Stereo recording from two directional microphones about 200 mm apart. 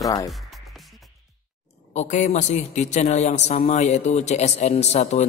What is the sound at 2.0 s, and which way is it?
A man's voice, 35° left (ahead or behind).